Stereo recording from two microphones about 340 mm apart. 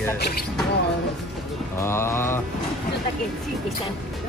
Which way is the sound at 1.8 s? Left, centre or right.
Centre.